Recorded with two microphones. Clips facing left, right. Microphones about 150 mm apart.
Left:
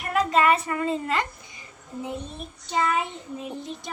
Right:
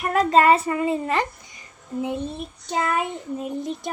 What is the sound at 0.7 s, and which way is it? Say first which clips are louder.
Speech: right 3 dB; 20° right (ahead or behind).